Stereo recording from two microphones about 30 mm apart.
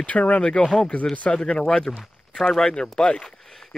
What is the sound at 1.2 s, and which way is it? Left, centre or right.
Speech, left.